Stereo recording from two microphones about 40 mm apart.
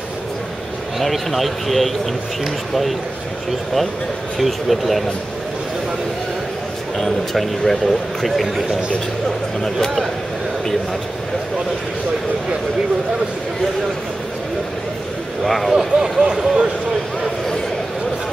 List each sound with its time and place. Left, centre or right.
0.9 s a man's voice: centre
4.4 s a man's voice: centre
7.0 s a man's voice: centre
15.4 s a man's voice: centre
15.7 s speech: centre